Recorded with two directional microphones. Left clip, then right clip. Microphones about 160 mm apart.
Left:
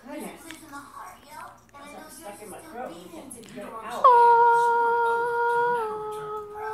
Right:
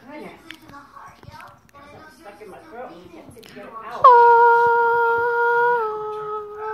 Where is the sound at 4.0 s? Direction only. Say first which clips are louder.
Right 5 dB; 20° right (ahead or behind).